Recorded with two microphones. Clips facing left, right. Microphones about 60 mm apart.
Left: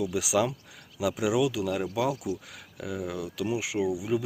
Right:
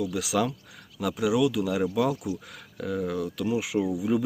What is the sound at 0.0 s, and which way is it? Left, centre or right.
Speech, centre.